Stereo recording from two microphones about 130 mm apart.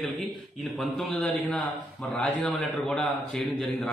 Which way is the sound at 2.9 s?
5° left (ahead or behind).